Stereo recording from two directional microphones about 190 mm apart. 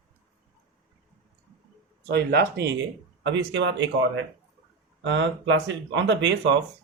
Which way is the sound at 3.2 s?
75° right (ahead or behind).